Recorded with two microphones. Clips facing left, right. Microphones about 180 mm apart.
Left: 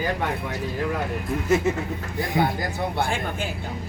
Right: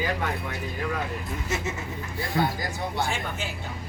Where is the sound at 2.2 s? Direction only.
20° left (ahead or behind).